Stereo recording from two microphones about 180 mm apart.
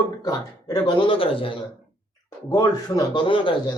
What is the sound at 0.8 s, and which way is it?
Speech, 30° left (ahead or behind).